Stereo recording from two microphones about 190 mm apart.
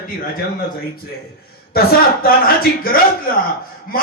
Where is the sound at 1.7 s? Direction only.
50° left (ahead or behind).